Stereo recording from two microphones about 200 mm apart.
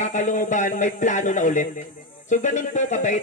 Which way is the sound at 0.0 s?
35° left (ahead or behind).